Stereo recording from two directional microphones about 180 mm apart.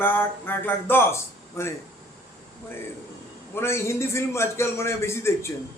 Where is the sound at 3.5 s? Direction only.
15° left (ahead or behind).